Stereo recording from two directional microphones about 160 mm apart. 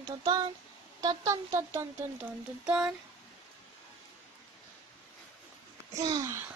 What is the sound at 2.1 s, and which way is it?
Speech, 5° right (ahead or behind).